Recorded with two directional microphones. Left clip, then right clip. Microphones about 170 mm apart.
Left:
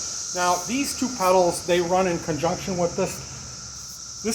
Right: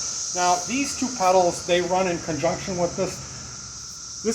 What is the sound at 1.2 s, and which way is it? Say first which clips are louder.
Speech: even; 55° left (ahead or behind).